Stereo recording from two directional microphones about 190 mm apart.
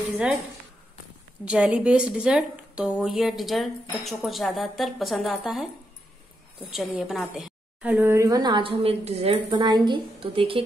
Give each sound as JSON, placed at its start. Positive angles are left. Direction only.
{"t": 1.4, "sound": "a woman's voice", "side_deg": -5}
{"t": 6.7, "sound": "a woman's voice", "side_deg": 0}